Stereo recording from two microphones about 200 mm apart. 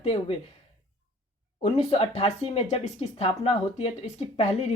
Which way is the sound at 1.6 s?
35° left (ahead or behind).